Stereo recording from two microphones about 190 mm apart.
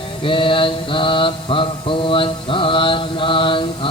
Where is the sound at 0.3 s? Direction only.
25° left (ahead or behind).